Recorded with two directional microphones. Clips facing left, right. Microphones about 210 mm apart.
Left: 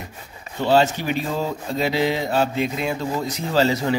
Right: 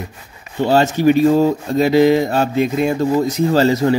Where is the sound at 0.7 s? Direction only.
45° right (ahead or behind).